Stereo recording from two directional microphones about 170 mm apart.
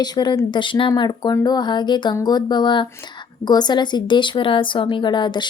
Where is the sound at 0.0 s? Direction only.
25° left (ahead or behind).